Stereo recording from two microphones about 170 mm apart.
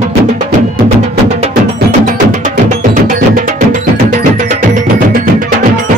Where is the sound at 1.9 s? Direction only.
45° right (ahead or behind).